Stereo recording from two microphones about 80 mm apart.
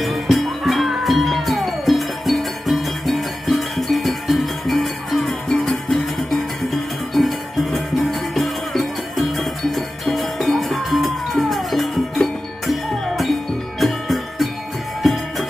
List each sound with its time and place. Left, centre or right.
0.0 s music: centre